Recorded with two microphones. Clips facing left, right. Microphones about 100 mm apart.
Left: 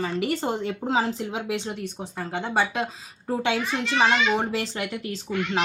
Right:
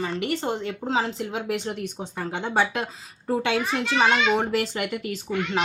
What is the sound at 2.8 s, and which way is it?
Speech, 5° right (ahead or behind).